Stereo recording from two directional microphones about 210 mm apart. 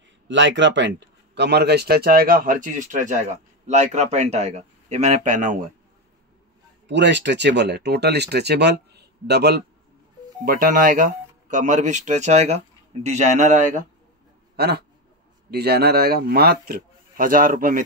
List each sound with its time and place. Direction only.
0.3 s speech: 60° right (ahead or behind); by 5.7 s 35° right (ahead or behind)
6.9 s speech: 55° right (ahead or behind); by 13.8 s 35° right (ahead or behind)
14.6 s speech: 50° right (ahead or behind)